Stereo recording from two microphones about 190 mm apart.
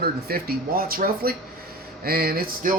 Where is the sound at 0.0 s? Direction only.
55° right (ahead or behind).